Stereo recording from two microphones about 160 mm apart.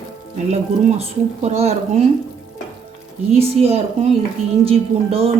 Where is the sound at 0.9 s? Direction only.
40° right (ahead or behind).